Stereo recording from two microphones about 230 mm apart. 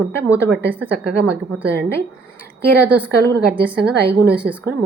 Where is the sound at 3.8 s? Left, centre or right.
Right.